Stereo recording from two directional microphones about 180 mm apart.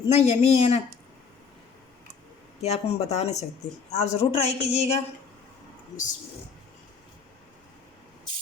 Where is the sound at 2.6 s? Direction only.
35° left (ahead or behind).